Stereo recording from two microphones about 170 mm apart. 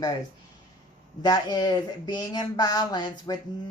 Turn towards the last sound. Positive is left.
turn(degrees=25)  # may be behind; listen again after turning